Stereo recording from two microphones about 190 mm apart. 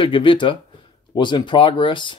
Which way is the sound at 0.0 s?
25° left (ahead or behind).